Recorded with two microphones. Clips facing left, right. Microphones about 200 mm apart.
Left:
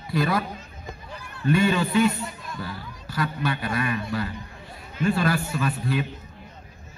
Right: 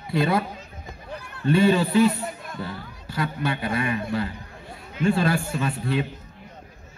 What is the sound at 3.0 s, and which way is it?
Speech, 25° right (ahead or behind).